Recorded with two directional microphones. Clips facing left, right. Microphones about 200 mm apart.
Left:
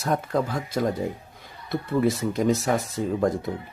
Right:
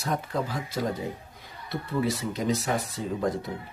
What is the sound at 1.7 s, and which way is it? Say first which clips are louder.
Speech: left 5 dB; 50° left (ahead or behind).